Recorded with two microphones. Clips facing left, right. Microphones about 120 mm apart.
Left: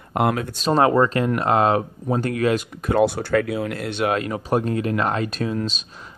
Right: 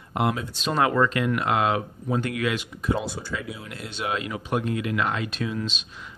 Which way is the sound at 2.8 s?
65° left (ahead or behind).